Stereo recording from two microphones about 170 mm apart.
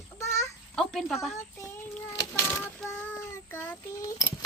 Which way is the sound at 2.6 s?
10° left (ahead or behind).